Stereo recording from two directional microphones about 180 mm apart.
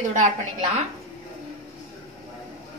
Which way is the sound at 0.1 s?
45° right (ahead or behind).